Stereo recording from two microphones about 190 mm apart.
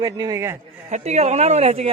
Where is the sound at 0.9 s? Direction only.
35° right (ahead or behind).